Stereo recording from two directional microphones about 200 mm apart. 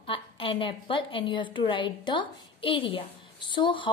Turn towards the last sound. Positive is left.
turn(degrees=25)  # may be behind; listen again after turning